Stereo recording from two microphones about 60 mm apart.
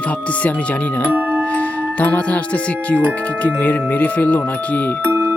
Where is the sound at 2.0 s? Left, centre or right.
Left.